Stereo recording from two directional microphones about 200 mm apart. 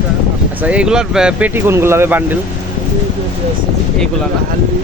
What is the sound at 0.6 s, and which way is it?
Speech, 5° right (ahead or behind).